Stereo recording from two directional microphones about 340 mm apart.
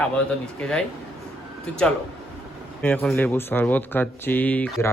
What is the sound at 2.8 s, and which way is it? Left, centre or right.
Speech, centre.